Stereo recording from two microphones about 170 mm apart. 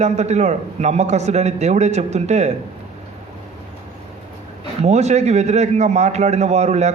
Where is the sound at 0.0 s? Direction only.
40° right (ahead or behind).